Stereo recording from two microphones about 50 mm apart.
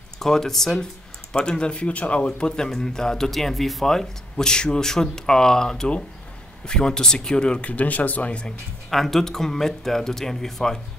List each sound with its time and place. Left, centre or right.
0.2 s a man's voice: centre
1.3 s speech: centre
2.2 s a man's voice: centre
7.7 s speech: left
8.9 s a man's voice: centre